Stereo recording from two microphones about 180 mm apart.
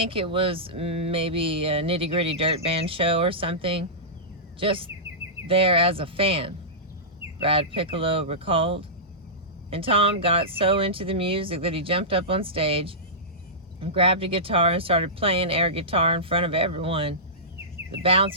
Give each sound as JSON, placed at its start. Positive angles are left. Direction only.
{"t": 0.0, "sound": "speech", "side_deg": -30}